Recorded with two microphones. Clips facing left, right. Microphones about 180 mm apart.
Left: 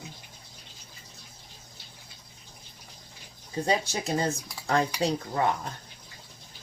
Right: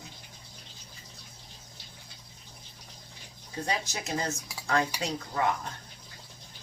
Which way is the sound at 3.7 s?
30° left (ahead or behind).